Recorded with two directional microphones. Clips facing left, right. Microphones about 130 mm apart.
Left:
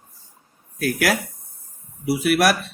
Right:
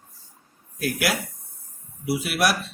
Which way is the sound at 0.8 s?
50° left (ahead or behind).